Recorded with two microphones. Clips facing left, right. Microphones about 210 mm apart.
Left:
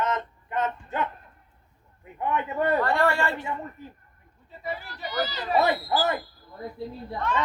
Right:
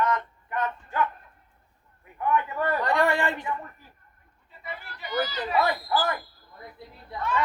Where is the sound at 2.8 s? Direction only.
15° right (ahead or behind).